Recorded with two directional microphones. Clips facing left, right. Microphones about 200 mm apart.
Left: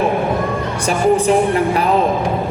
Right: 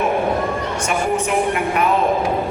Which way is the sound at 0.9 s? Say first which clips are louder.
Left 7 dB; 35° left (ahead or behind).